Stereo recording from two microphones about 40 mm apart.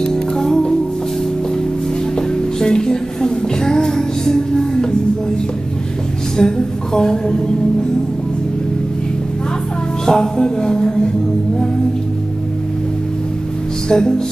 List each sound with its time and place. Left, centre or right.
0.0 s music: centre
2.1 s music: centre
6.3 s a woman's voice: centre
10.0 s a woman's voice: centre
13.8 s a woman's voice: centre